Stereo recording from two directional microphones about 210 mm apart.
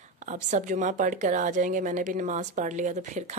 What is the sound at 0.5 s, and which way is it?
A woman's voice, 35° right (ahead or behind).